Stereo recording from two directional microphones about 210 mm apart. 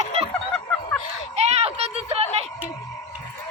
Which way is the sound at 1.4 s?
30° right (ahead or behind).